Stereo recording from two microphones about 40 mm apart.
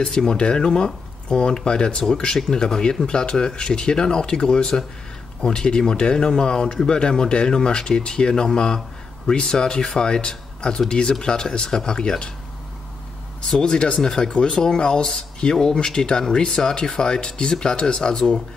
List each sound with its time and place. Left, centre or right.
0.3 s speech: centre
13.6 s speech: left